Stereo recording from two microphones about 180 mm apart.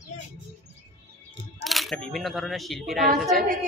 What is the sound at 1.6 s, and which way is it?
Speech, centre (ahead or behind).